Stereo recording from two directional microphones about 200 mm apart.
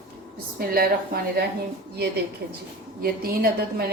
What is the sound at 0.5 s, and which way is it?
A woman's voice, 50° right (ahead or behind).